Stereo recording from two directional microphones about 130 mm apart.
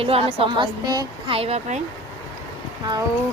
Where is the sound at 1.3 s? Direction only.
50° right (ahead or behind).